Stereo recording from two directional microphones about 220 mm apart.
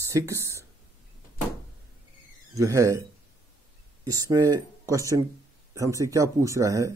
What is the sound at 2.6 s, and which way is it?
Speech, 15° right (ahead or behind).